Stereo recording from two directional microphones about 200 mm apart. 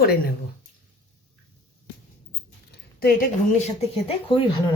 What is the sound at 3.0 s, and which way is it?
Speech, 50° left (ahead or behind).